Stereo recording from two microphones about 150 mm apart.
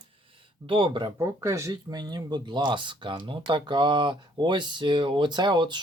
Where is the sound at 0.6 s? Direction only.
35° right (ahead or behind).